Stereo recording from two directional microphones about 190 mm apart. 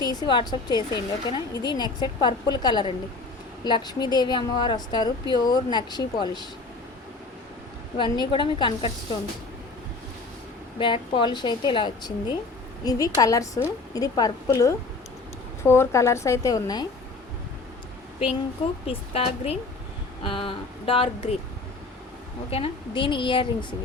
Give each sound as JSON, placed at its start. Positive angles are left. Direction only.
{"t": 0.0, "sound": "a woman's voice", "side_deg": 20}
{"t": 7.9, "sound": "a woman's voice", "side_deg": 25}
{"t": 10.8, "sound": "a woman's voice", "side_deg": 25}
{"t": 18.9, "sound": "a woman's voice", "side_deg": 30}
{"t": 22.4, "sound": "a woman's voice", "side_deg": 30}